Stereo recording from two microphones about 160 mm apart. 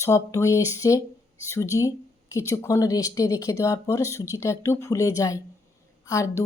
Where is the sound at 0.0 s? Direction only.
20° left (ahead or behind).